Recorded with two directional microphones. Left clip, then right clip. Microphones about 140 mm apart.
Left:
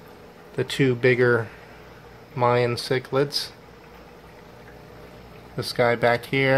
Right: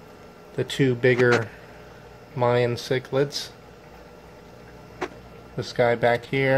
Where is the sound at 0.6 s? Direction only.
Centre (ahead or behind).